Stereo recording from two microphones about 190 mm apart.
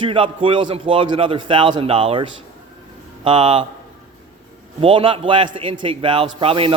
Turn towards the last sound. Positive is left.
turn(degrees=-30)  # may be behind; listen again after turning